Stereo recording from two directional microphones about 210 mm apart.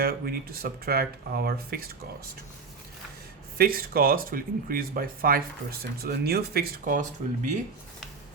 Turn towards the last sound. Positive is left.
turn(degrees=-40)  # may be behind; listen again after turning